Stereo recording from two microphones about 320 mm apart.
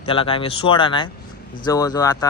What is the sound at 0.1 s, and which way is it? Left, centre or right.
A man's voice, centre.